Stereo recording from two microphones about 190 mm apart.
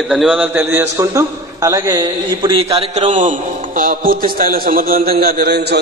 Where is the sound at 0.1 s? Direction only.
5° right (ahead or behind).